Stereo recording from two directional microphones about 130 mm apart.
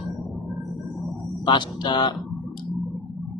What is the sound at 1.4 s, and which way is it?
Speech, 35° left (ahead or behind).